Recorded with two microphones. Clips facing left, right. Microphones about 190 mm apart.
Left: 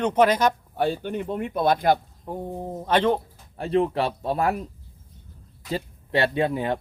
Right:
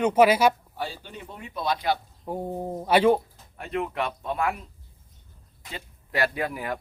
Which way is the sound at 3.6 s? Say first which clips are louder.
Left 7 dB; 30° left (ahead or behind).